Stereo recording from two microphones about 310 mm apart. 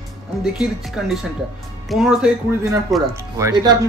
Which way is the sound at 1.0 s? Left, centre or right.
Centre.